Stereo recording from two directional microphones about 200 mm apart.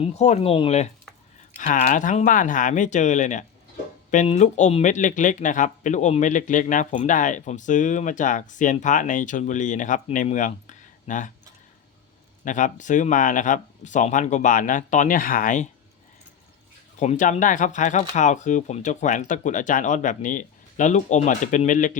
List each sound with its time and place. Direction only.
0.0 s speech: 35° left (ahead or behind)
12.5 s speech: 40° left (ahead or behind)
17.0 s speech: 40° left (ahead or behind)